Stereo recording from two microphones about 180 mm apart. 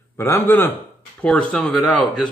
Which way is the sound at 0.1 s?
10° left (ahead or behind).